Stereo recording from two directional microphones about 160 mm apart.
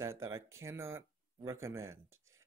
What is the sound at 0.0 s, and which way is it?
Speech, 15° right (ahead or behind).